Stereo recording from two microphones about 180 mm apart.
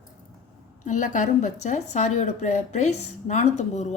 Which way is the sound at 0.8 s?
45° left (ahead or behind).